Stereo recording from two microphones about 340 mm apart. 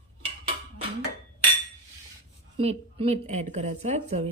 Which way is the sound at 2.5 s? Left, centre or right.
Centre.